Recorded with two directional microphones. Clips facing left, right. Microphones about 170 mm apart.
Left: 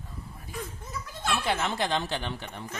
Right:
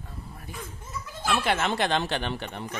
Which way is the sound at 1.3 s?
70° right (ahead or behind).